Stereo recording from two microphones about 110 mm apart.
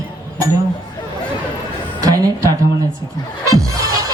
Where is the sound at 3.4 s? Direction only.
30° right (ahead or behind).